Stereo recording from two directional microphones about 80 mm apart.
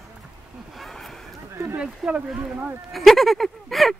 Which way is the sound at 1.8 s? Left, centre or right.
Centre.